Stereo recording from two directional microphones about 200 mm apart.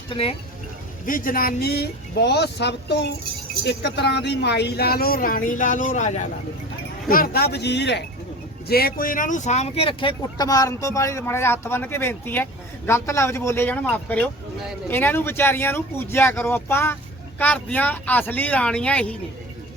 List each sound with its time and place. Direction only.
0.1 s speech: 30° left (ahead or behind)
1.0 s speech: 45° left (ahead or behind)
7.1 s speech: 50° left (ahead or behind); by 19.1 s 5° left (ahead or behind)